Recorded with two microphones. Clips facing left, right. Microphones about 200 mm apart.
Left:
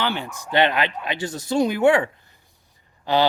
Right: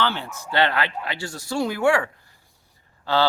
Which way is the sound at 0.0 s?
15° left (ahead or behind).